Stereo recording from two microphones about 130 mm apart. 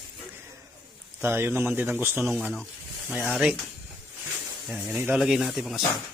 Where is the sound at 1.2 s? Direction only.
15° right (ahead or behind).